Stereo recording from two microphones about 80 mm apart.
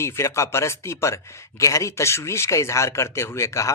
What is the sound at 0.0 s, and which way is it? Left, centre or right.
A man's voice, left.